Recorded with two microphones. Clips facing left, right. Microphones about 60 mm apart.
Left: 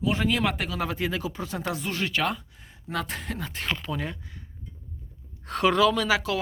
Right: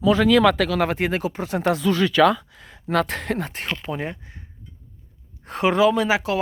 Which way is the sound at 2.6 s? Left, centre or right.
Right.